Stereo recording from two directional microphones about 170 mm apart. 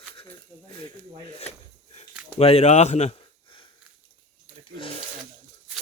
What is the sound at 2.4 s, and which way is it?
Speech, 35° left (ahead or behind).